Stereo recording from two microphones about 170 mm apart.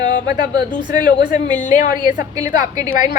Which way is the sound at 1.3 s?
45° left (ahead or behind).